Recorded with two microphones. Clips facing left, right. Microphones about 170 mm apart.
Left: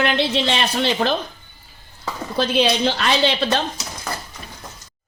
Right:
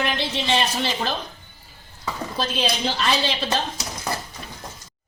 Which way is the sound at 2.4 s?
70° left (ahead or behind).